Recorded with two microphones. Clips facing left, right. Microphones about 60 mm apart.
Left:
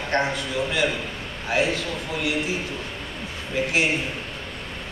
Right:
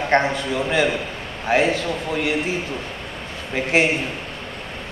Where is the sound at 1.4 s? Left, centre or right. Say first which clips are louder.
Right 5 dB; right.